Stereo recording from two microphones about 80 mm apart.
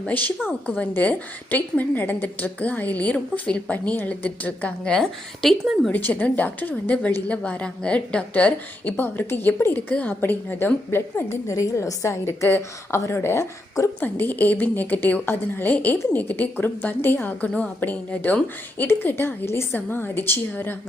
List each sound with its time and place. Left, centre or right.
0.0 s a woman's voice: left
5.9 s a woman's voice: left
14.0 s a woman's voice: left